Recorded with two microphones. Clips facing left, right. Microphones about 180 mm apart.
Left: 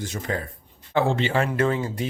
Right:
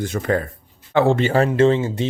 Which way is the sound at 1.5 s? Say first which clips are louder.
Right 7 dB; 25° right (ahead or behind).